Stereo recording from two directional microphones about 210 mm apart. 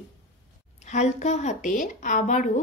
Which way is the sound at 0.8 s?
35° left (ahead or behind).